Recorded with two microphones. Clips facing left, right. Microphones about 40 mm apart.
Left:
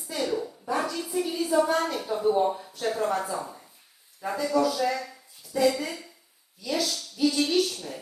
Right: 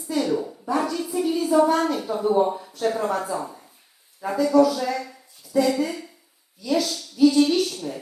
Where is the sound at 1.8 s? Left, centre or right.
Centre.